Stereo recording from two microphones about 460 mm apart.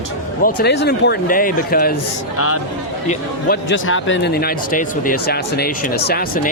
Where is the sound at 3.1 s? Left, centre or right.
Left.